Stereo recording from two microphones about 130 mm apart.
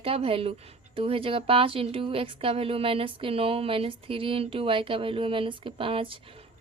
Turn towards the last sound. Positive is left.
turn(degrees=-45)  # may be behind; listen again after turning